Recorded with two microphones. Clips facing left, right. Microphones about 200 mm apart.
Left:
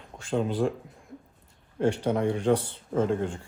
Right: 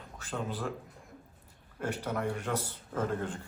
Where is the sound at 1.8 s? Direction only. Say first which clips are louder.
Left 9 dB; 30° left (ahead or behind).